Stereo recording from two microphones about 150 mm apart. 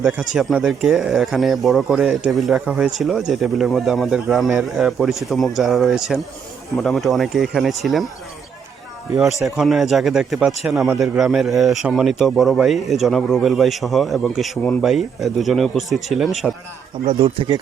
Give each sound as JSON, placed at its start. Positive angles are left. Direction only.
{"t": 0.3, "sound": "speech", "side_deg": 0}
{"t": 9.6, "sound": "speech", "side_deg": 0}
{"t": 17.1, "sound": "speech", "side_deg": -40}